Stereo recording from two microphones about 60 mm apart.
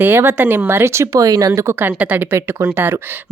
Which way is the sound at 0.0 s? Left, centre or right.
Right.